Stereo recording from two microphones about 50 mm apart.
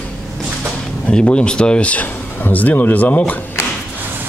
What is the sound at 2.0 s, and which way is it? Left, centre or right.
Speech, left.